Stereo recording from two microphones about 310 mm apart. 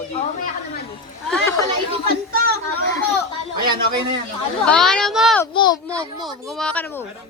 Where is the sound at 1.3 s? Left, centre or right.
Centre.